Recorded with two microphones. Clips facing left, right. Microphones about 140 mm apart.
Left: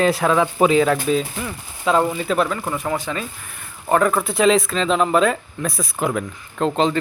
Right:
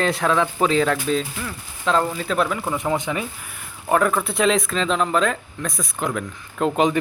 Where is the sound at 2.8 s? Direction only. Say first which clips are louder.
Right 1 dB; 20° right (ahead or behind).